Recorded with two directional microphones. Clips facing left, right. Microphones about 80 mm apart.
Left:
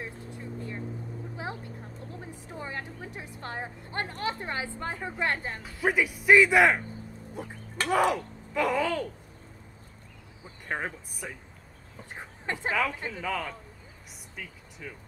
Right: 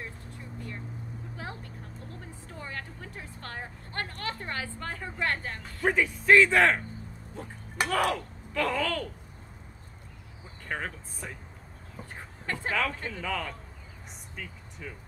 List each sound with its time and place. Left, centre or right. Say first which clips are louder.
0.0 s vehicle: left 3 dB; left
5.6 s speech: even; centre
10.7 s speech: left 2 dB; centre
12.1 s a sound: left 2 dB; centre
12.7 s speech: even; centre
14.3 s vehicle: even; centre